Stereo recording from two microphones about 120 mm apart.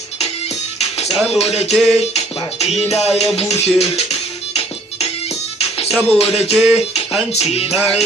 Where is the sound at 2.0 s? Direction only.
60° left (ahead or behind).